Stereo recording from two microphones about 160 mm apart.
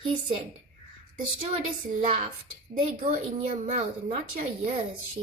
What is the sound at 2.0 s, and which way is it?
Speech, 45° right (ahead or behind).